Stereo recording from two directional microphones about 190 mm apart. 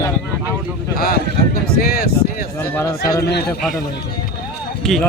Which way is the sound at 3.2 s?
60° left (ahead or behind).